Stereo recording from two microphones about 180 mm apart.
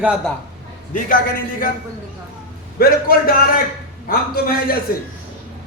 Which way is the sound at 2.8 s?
55° left (ahead or behind).